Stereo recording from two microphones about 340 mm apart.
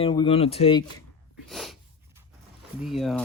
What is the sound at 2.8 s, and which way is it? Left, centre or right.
Speech, centre.